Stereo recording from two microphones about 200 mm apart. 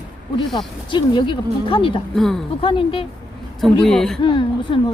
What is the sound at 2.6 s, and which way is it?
Speech, 25° left (ahead or behind).